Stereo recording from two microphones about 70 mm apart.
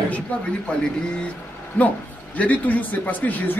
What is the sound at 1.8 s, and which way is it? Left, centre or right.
Speech, left.